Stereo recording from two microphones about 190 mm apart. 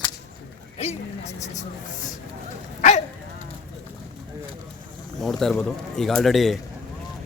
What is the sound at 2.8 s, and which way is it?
Dog, 40° left (ahead or behind).